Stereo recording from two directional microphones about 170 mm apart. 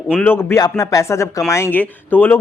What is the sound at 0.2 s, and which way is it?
Speech, 10° left (ahead or behind).